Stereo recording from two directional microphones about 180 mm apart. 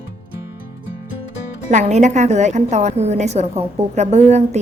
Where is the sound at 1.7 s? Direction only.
40° right (ahead or behind).